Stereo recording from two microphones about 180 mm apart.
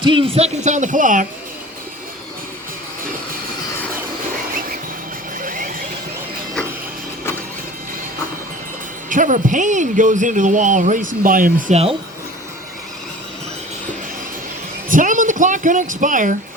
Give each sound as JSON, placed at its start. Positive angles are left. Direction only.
{"t": 0.0, "sound": "speech", "side_deg": -25}
{"t": 0.3, "sound": "speech", "side_deg": -40}
{"t": 5.4, "sound": "a sound", "side_deg": -50}
{"t": 9.0, "sound": "speech", "side_deg": -45}
{"t": 14.8, "sound": "speech", "side_deg": -45}